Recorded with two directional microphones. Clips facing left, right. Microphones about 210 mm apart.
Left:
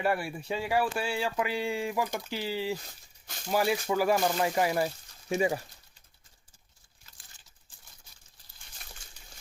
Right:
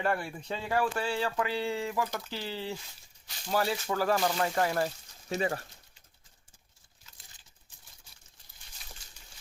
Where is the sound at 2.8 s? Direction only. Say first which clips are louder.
Left 3 dB; 45° left (ahead or behind).